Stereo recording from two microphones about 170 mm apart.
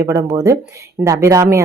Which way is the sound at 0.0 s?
20° right (ahead or behind).